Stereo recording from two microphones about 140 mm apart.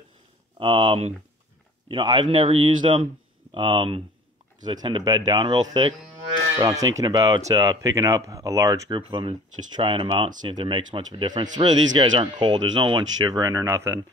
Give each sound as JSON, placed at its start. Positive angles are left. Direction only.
{"t": 0.6, "sound": "speech", "side_deg": -40}
{"t": 1.9, "sound": "speech", "side_deg": -35}